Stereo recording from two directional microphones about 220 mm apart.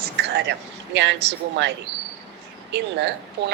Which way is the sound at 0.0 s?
50° right (ahead or behind).